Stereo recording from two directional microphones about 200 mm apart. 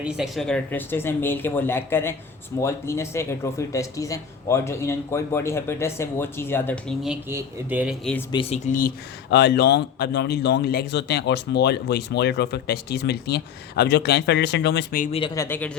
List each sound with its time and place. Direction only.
0.0 s speech: centre (ahead or behind)
7.0 s a man's voice: 10° right (ahead or behind)
8.3 s speech: 30° left (ahead or behind)
9.3 s speech: 55° left (ahead or behind)
15.0 s speech: 30° left (ahead or behind)
15.4 s speech: 10° left (ahead or behind)